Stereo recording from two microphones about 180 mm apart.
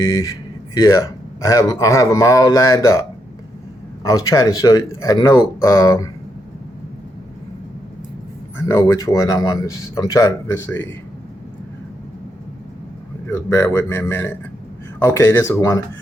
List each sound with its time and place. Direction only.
0.0 s speech: 20° left (ahead or behind)
4.0 s speech: 20° left (ahead or behind)
8.5 s speech: 15° left (ahead or behind)
13.3 s speech: 15° left (ahead or behind)